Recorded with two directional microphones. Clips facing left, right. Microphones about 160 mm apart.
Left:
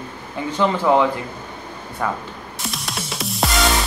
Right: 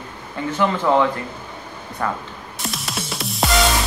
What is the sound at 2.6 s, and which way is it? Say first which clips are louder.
Music: right 1 dB; centre (ahead or behind).